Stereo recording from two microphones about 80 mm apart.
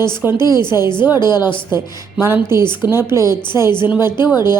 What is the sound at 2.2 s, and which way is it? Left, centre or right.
Speech, right.